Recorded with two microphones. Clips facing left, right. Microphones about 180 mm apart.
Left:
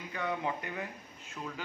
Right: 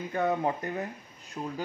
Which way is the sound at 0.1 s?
45° right (ahead or behind).